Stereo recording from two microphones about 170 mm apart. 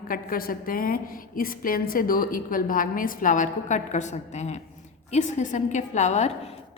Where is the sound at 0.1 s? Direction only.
55° left (ahead or behind).